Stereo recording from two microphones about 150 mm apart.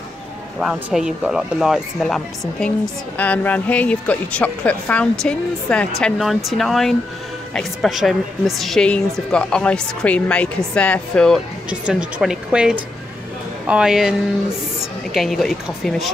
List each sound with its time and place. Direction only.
0.6 s a woman's voice: 5° right (ahead or behind)
11.8 s a woman's voice: 5° right (ahead or behind)
15.1 s speech: centre (ahead or behind)